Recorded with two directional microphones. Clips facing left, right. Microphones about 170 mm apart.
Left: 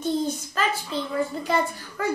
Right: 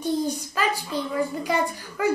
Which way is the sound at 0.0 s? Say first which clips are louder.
Even; 10° right (ahead or behind).